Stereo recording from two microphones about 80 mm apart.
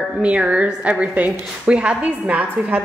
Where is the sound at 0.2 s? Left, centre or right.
Centre.